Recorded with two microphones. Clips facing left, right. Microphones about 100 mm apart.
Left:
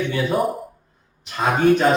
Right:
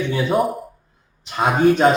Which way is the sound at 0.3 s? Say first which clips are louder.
Right 3 dB; centre (ahead or behind).